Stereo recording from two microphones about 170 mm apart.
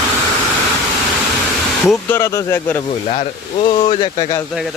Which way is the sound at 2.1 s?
15° left (ahead or behind).